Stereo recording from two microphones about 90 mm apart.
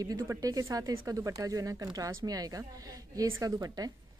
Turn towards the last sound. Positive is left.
turn(degrees=-45)  # may be behind; listen again after turning